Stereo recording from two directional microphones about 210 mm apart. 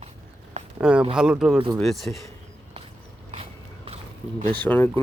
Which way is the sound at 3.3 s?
30° right (ahead or behind).